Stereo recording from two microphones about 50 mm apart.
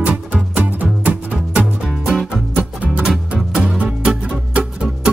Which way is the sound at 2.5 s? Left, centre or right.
Right.